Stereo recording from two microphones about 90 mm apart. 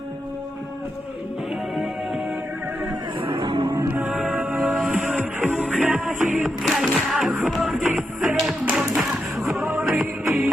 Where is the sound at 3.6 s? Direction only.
35° right (ahead or behind).